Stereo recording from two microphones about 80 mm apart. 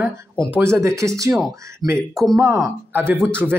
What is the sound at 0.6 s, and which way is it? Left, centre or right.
Speech, right.